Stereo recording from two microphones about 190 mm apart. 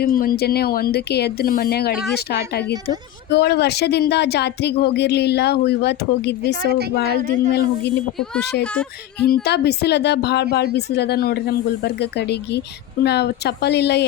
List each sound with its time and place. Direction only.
0.0 s speech: 50° left (ahead or behind)
7.0 s speech: 45° right (ahead or behind)
9.2 s speech: 55° left (ahead or behind)